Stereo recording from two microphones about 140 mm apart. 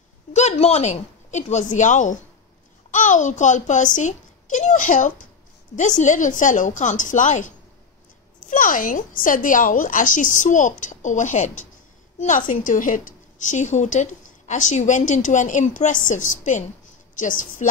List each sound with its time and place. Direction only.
0.3 s a woman's voice: 55° left (ahead or behind)
8.5 s a woman's voice: 75° left (ahead or behind)